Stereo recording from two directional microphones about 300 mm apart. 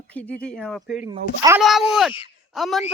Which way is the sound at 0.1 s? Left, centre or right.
Centre.